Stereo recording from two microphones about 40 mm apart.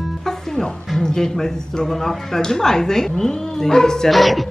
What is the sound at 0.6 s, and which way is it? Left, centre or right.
Speech, centre.